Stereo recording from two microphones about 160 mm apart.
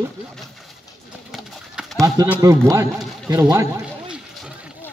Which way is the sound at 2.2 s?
25° right (ahead or behind).